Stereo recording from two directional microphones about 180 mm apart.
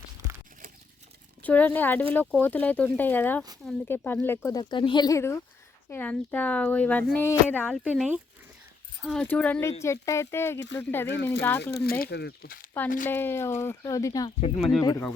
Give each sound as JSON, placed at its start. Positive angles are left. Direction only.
{"t": 1.4, "sound": "speech", "side_deg": 10}
{"t": 9.2, "sound": "speech", "side_deg": 10}
{"t": 11.1, "sound": "speech", "side_deg": 70}
{"t": 11.3, "sound": "speech", "side_deg": 10}
{"t": 11.6, "sound": "speech", "side_deg": 65}
{"t": 13.1, "sound": "speech", "side_deg": 10}